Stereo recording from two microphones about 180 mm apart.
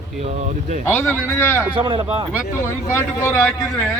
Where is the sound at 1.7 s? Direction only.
30° right (ahead or behind).